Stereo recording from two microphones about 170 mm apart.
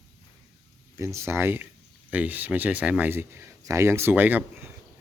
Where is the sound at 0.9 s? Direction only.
15° right (ahead or behind).